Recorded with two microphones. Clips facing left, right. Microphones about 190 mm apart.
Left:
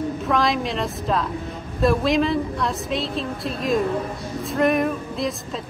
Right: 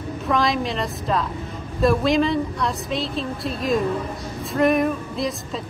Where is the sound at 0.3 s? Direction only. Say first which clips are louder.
Right 1 dB; centre (ahead or behind).